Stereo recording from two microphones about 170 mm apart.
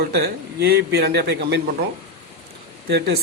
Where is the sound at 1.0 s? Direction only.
75° right (ahead or behind).